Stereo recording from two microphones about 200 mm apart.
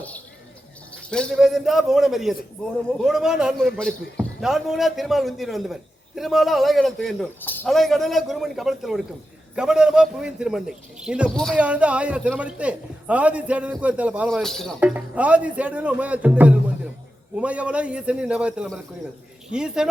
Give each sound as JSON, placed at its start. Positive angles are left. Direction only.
{"t": 1.1, "sound": "a man's voice", "side_deg": 0}